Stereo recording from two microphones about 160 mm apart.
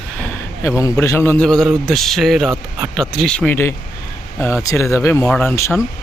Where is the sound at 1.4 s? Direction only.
5° left (ahead or behind).